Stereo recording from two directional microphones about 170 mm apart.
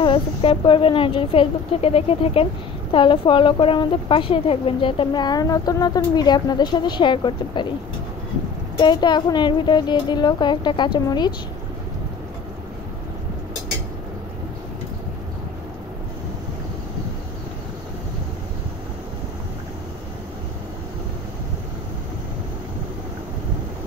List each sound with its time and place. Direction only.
0.0 s a woman's voice: 30° left (ahead or behind)
8.7 s a woman's voice: 25° left (ahead or behind)